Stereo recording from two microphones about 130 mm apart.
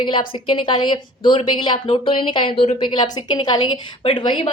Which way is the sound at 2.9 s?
35° left (ahead or behind).